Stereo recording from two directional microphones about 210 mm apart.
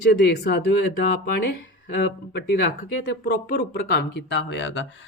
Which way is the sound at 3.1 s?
50° left (ahead or behind).